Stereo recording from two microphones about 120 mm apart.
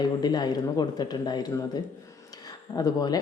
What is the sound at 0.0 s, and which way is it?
Speech, 35° left (ahead or behind).